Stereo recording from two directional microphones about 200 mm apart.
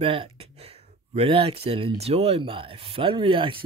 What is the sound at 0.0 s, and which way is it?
Speech, 25° right (ahead or behind).